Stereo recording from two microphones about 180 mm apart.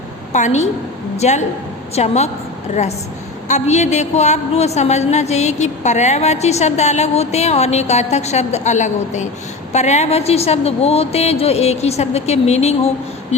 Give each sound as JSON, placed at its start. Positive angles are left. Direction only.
{"t": 0.3, "sound": "a woman's voice", "side_deg": 40}
{"t": 3.5, "sound": "a woman's voice", "side_deg": 40}